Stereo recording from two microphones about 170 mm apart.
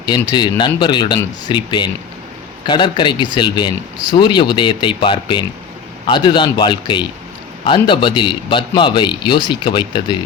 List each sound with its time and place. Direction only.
0.3 s a man's voice: 25° left (ahead or behind)